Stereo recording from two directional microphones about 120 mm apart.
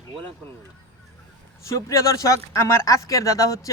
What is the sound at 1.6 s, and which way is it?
Speech, 25° left (ahead or behind).